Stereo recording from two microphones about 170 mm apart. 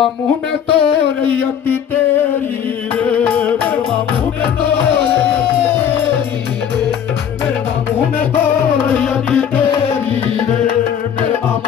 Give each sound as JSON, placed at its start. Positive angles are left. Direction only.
{"t": 0.7, "sound": "a sound", "side_deg": 35}
{"t": 3.0, "sound": "music", "side_deg": 10}
{"t": 8.4, "sound": "music", "side_deg": 5}